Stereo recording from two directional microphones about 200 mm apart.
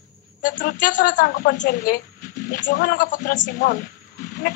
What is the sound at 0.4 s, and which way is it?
Speech, 40° left (ahead or behind).